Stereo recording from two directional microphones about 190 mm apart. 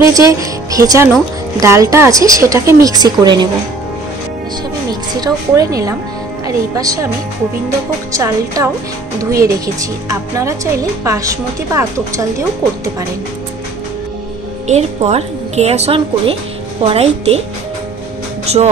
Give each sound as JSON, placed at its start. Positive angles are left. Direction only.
{"t": 0.1, "sound": "a woman's voice", "side_deg": -20}
{"t": 5.2, "sound": "a woman's voice", "side_deg": -20}
{"t": 8.1, "sound": "a woman's voice", "side_deg": -15}
{"t": 14.7, "sound": "a woman's voice", "side_deg": -35}
{"t": 18.5, "sound": "a woman's voice", "side_deg": -35}